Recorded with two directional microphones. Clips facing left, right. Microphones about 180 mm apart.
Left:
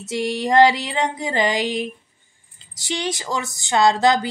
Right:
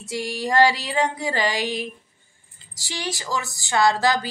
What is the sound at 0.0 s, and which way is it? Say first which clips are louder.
A woman's voice: left 4 dB; 20° left (ahead or behind).